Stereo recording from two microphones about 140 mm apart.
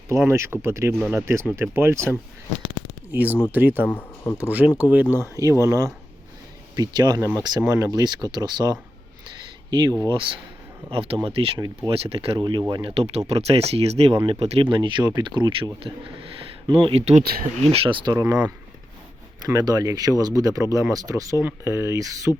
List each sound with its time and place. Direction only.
0.1 s speech: 20° right (ahead or behind)
3.1 s speech: 10° right (ahead or behind)
3.8 s speech: 15° left (ahead or behind)
4.4 s speech: 10° right (ahead or behind)
5.4 s speech: 25° right (ahead or behind)
12.9 s speech: 45° right (ahead or behind)
19.5 s speech: 25° right (ahead or behind)